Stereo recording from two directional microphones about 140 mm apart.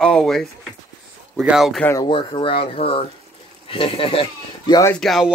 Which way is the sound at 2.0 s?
35° left (ahead or behind).